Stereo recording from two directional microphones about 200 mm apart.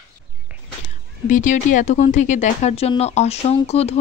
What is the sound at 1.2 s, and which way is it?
Speech, 40° left (ahead or behind).